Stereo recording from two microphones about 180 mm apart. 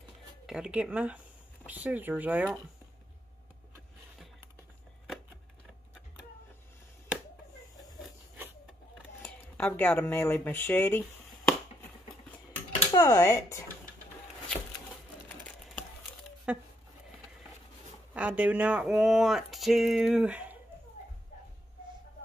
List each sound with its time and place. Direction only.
0.5 s speech: 5° right (ahead or behind)
9.2 s speech: 10° left (ahead or behind)
12.9 s speech: 20° left (ahead or behind)
16.5 s speech: 5° right (ahead or behind)
18.1 s speech: 10° right (ahead or behind)